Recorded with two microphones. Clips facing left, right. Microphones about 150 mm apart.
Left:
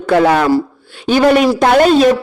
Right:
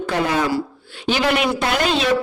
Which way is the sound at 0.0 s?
65° left (ahead or behind).